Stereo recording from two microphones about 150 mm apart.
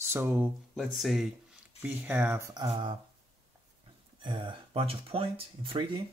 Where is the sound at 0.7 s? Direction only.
Centre (ahead or behind).